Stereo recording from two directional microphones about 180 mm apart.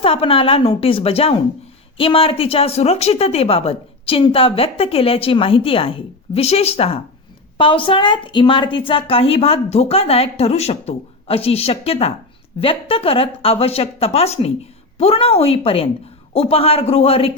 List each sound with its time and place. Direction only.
0.0 s a woman's voice: 30° left (ahead or behind)